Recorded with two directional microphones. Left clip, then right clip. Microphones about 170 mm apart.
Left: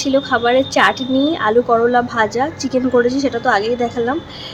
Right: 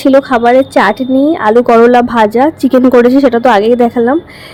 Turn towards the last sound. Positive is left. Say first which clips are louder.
# right 9 dB
turn(degrees=-40)  # may be behind; listen again after turning